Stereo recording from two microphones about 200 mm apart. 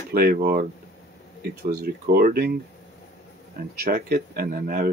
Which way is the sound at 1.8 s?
50° right (ahead or behind).